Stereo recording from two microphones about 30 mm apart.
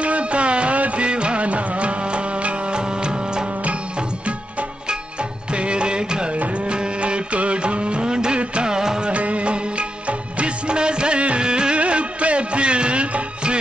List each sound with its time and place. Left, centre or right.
0.0 s music: right
0.7 s music: right
1.0 s music: right
5.5 s music: right
9.0 s music of bollywood: right
11.8 s music: right